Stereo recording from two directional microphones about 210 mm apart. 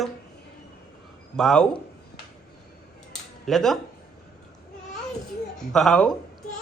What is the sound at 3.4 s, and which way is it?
Speech, centre (ahead or behind).